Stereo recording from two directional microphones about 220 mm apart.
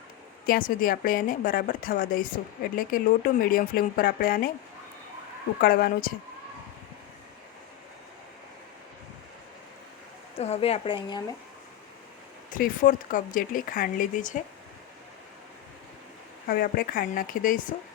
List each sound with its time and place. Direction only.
0.4 s a woman's voice: 40° left (ahead or behind)
5.5 s speech: 45° left (ahead or behind)
10.3 s speech: 30° left (ahead or behind)
12.5 s a woman's voice: 40° left (ahead or behind)
16.5 s a woman's voice: 40° left (ahead or behind)